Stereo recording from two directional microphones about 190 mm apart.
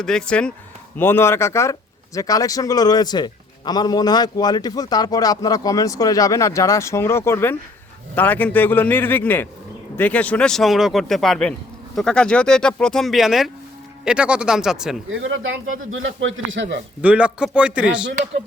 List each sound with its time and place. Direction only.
0.0 s a man's voice: 5° left (ahead or behind)
15.1 s speech: 90° right; by 16.8 s 70° right (ahead or behind)
17.0 s a man's voice: 5° right (ahead or behind)